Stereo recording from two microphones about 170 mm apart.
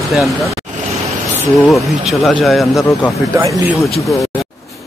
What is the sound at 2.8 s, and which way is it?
A man's voice, 15° left (ahead or behind).